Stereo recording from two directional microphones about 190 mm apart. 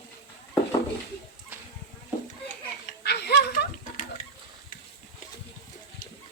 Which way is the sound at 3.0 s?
60° left (ahead or behind).